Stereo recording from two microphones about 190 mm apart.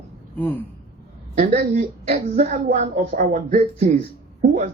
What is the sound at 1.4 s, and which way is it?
Speech, 40° right (ahead or behind).